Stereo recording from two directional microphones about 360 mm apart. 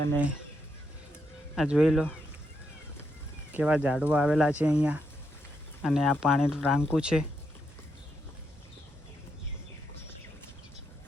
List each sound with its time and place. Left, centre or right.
1.5 s speech: centre
3.5 s speech: centre